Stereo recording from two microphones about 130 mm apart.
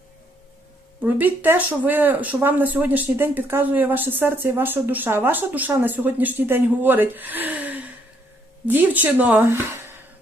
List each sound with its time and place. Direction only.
1.0 s a woman's voice: 15° right (ahead or behind)